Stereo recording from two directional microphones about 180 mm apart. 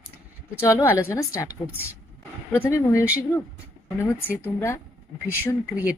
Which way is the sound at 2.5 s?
15° left (ahead or behind).